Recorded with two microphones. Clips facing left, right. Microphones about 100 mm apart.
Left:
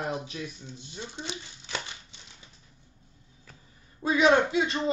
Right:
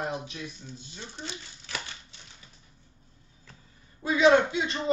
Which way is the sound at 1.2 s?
20° left (ahead or behind).